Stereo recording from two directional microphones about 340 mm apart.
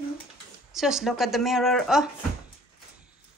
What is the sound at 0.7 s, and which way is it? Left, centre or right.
Speech, centre.